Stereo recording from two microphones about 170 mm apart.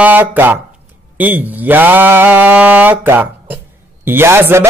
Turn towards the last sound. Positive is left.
turn(degrees=-15)  # may be behind; listen again after turning